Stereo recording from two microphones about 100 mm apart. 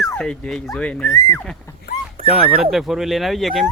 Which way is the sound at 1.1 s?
30° left (ahead or behind).